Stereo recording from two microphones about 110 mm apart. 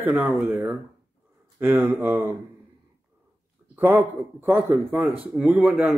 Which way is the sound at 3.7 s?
20° right (ahead or behind).